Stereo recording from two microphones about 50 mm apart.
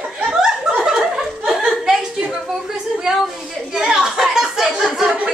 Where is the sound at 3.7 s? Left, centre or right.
Centre.